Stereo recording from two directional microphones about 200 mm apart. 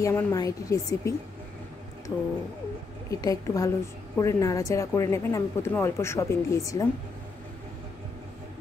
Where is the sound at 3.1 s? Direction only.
15° left (ahead or behind).